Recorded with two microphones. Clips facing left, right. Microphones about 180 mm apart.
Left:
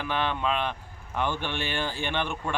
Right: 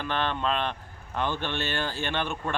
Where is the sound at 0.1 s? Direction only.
10° left (ahead or behind).